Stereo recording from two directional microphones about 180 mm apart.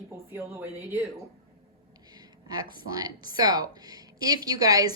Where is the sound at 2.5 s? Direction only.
20° right (ahead or behind).